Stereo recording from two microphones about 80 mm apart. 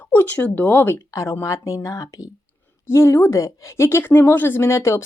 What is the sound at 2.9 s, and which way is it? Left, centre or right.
Speech, left.